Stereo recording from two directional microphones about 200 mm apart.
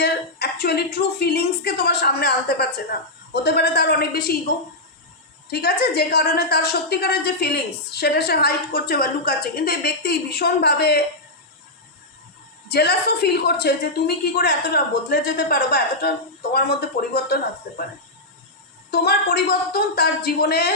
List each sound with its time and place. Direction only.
0.0 s a woman's voice: 55° left (ahead or behind)
5.5 s a woman's voice: 50° left (ahead or behind)
12.6 s a woman's voice: 55° left (ahead or behind)
18.9 s a woman's voice: 50° left (ahead or behind)